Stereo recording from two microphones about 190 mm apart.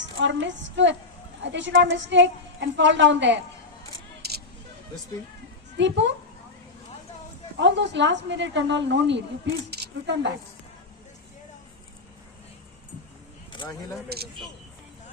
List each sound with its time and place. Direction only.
0.2 s a woman's voice: 75° right (ahead or behind)
4.2 s vehicle: 55° right (ahead or behind)
5.7 s a woman's voice: 70° right (ahead or behind)
7.6 s a woman's voice: 70° right (ahead or behind)
13.5 s a sound: 25° left (ahead or behind)
14.1 s speech: 55° right (ahead or behind)